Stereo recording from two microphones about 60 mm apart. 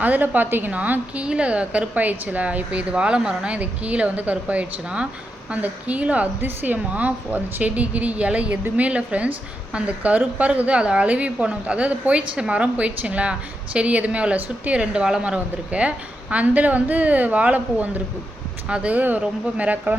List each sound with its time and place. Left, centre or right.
0.0 s a woman's voice: right